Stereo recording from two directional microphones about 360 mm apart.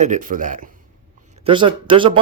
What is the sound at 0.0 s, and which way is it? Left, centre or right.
A man's voice, right.